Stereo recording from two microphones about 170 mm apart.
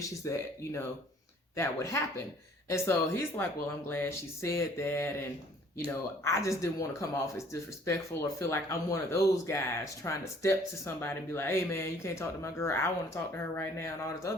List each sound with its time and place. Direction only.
0.0 s speech: 15° left (ahead or behind)
6.2 s speech: 15° left (ahead or behind)